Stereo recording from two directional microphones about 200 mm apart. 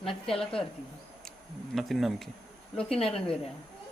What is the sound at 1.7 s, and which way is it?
Speech, centre (ahead or behind).